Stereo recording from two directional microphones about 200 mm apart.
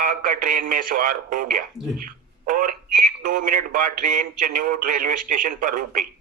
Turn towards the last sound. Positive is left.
turn(degrees=-45)  # may be behind; listen again after turning